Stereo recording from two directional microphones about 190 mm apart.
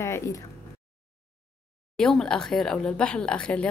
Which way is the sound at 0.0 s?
15° left (ahead or behind).